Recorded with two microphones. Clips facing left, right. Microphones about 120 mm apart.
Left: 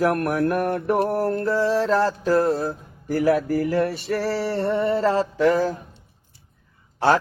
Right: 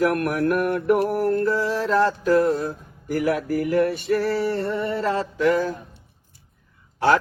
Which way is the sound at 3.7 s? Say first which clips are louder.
Right 2 dB; 30° left (ahead or behind).